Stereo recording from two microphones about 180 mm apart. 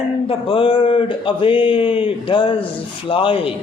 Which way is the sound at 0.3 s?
30° left (ahead or behind).